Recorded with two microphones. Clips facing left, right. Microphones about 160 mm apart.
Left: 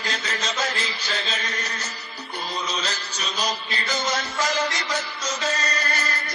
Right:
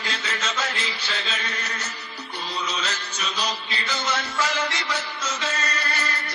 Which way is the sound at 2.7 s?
35° left (ahead or behind).